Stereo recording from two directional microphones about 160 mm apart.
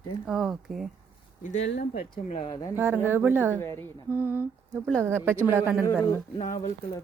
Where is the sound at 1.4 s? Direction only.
50° left (ahead or behind).